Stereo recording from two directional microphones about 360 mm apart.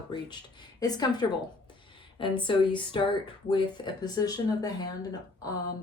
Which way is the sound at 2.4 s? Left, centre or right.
Centre.